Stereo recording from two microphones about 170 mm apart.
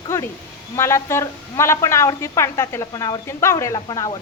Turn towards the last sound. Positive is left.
turn(degrees=25)  # may be behind; listen again after turning